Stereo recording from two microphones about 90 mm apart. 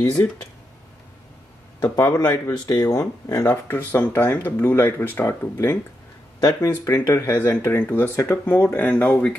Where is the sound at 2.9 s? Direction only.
35° left (ahead or behind); by 9.3 s 15° left (ahead or behind).